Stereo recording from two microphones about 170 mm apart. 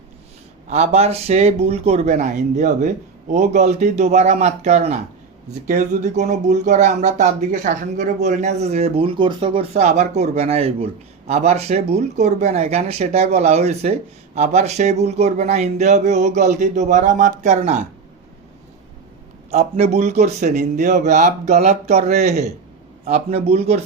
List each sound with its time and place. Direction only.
0.7 s speech: 40° right (ahead or behind)
19.5 s speech: 40° right (ahead or behind)